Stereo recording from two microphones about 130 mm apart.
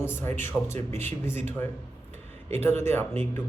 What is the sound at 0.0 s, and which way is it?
A man's voice, 15° left (ahead or behind).